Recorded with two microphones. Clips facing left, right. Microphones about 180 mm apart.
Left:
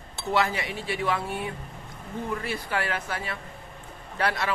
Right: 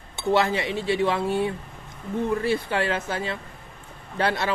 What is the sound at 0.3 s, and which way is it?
Speech, 25° right (ahead or behind).